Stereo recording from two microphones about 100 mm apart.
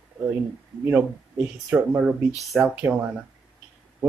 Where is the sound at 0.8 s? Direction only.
15° right (ahead or behind).